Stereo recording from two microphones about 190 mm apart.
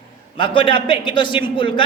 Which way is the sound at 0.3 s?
25° left (ahead or behind).